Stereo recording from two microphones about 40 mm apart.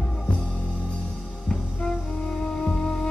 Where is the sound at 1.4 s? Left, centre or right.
Centre.